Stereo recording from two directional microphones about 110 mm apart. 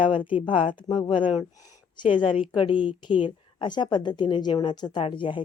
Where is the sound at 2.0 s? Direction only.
15° right (ahead or behind).